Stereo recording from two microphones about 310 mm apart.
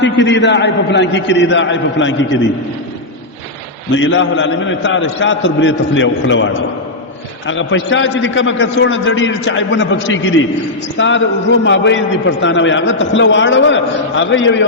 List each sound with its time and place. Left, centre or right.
0.0 s a man's voice: left
3.9 s a man's voice: left